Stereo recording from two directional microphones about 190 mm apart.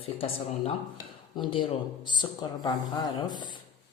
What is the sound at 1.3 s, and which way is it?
Speech, 25° left (ahead or behind).